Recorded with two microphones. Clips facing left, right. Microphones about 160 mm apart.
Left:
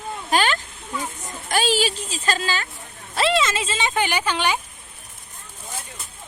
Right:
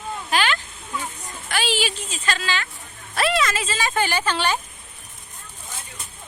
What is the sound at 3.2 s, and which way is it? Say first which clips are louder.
Speech: left 1 dB; 25° left (ahead or behind).